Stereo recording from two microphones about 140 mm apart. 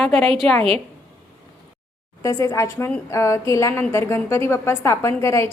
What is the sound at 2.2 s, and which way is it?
A woman's voice, 20° left (ahead or behind).